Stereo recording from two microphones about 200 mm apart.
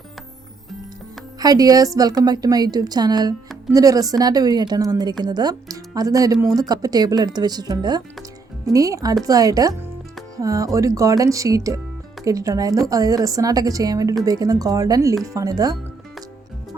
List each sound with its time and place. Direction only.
1.4 s a woman's voice: 20° right (ahead or behind)